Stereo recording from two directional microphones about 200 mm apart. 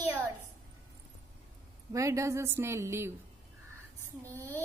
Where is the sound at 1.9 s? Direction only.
15° right (ahead or behind).